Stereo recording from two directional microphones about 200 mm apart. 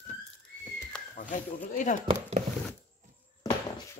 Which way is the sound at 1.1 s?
40° left (ahead or behind).